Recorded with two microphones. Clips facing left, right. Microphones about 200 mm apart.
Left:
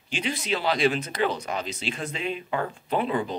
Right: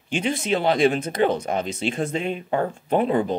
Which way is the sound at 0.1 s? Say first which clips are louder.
Right 5 dB; 50° right (ahead or behind).